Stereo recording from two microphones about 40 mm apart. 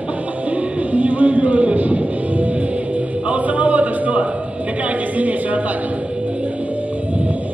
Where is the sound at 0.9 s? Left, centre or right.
Right.